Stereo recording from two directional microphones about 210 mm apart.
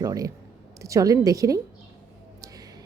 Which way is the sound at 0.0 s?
15° right (ahead or behind).